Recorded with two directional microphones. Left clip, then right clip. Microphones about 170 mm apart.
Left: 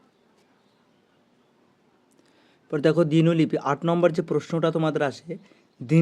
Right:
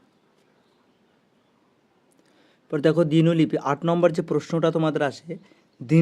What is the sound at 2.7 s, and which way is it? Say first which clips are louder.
Speech: right 1 dB; 5° right (ahead or behind).